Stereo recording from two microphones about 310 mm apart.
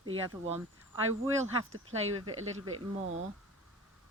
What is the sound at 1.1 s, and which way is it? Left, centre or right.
Speech, right.